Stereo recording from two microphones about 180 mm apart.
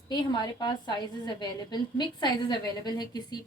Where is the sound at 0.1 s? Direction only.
20° left (ahead or behind).